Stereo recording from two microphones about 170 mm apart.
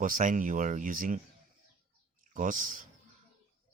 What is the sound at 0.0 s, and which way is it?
Speech, 50° right (ahead or behind).